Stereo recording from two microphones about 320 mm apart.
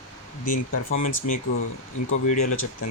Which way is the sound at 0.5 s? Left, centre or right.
Left.